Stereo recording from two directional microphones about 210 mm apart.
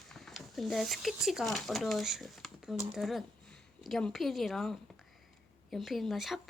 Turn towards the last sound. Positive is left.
turn(degrees=0)  # may be behind; listen again after turning